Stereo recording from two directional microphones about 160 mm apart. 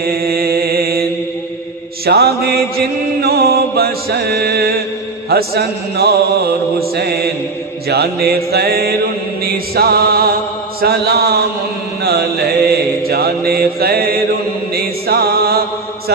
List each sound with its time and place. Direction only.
0.0 s mantra: 75° right (ahead or behind)
2.0 s mantra: 85° right
14.7 s music: 75° right (ahead or behind)